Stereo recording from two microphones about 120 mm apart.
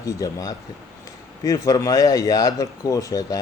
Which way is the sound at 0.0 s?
30° left (ahead or behind).